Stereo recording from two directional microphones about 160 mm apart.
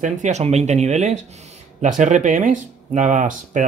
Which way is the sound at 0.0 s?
45° right (ahead or behind).